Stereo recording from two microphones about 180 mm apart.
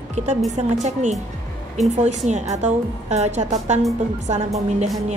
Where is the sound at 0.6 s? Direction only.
40° right (ahead or behind).